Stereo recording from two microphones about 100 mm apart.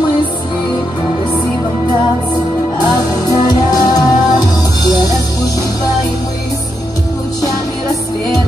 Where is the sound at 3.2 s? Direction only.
40° left (ahead or behind).